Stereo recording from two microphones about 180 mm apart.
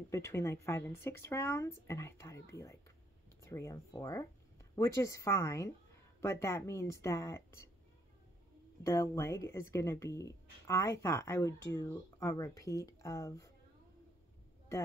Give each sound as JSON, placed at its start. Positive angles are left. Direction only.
{"t": 0.1, "sound": "speech", "side_deg": 15}
{"t": 8.8, "sound": "speech", "side_deg": 15}